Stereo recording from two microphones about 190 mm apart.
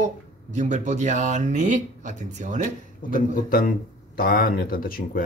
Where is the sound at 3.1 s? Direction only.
50° left (ahead or behind).